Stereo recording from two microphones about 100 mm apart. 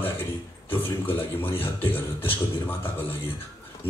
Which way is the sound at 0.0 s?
20° left (ahead or behind).